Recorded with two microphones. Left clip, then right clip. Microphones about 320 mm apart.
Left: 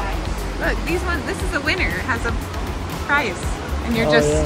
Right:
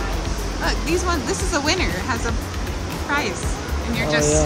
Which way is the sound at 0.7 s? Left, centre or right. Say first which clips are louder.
Right 1 dB; centre.